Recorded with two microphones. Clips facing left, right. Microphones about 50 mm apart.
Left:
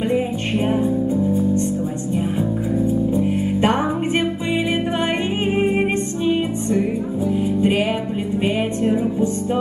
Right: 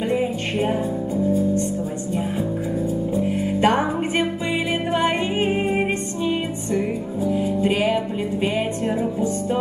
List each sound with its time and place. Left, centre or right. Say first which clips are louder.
3.6 s music: right 1 dB; left
7.6 s music: even; left